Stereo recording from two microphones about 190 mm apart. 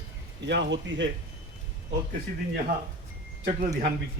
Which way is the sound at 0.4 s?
65° right (ahead or behind).